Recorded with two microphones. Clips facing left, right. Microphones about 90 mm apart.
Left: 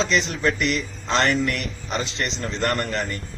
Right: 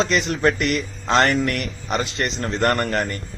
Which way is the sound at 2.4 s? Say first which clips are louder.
Right 4 dB; 50° right (ahead or behind).